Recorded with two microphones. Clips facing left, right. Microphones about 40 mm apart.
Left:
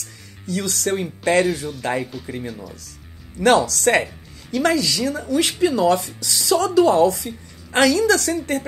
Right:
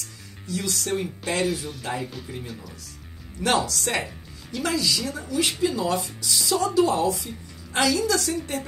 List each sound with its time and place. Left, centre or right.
0.5 s speech: left
3.3 s speech: left
3.7 s speech: left